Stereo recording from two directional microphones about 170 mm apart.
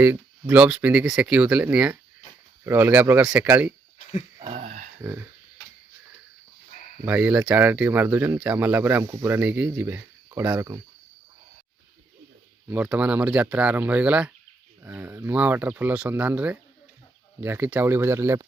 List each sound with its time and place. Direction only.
0.0 s speech: 10° right (ahead or behind)
4.4 s a sound: 40° right (ahead or behind)
7.0 s speech: 10° right (ahead or behind)
12.6 s speech: 10° right (ahead or behind)